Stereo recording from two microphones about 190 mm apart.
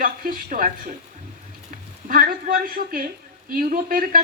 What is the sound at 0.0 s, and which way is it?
Speech, 50° right (ahead or behind).